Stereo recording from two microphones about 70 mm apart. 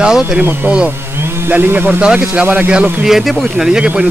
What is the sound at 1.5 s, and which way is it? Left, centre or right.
Speech, right.